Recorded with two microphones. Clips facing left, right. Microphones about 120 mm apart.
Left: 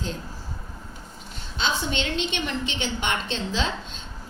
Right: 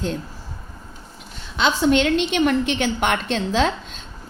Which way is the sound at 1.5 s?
80° right.